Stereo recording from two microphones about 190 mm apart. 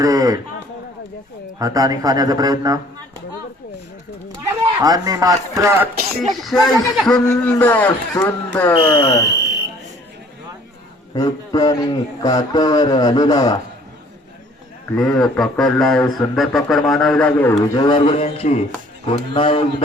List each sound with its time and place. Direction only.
0.0 s a sound: 20° right (ahead or behind)
1.5 s speech: 20° right (ahead or behind)
4.6 s a man's voice: 20° right (ahead or behind)
6.4 s a man's voice: centre (ahead or behind)
8.7 s a man's voice: 25° left (ahead or behind)
11.1 s a man's voice: 20° left (ahead or behind)
14.9 s a man's voice: 5° left (ahead or behind)
17.7 s a man's voice: 25° left (ahead or behind)